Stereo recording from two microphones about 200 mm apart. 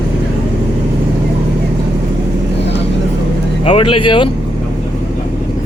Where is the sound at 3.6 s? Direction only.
25° left (ahead or behind).